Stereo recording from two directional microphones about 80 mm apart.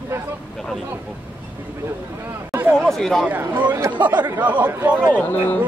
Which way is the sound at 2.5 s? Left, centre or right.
Right.